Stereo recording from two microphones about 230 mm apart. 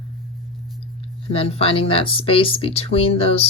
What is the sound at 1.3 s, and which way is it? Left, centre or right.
Speech, left.